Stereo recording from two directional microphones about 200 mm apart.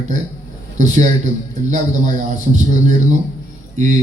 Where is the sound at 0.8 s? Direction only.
35° right (ahead or behind).